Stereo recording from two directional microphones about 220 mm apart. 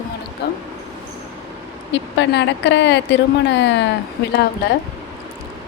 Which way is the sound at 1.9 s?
55° left (ahead or behind).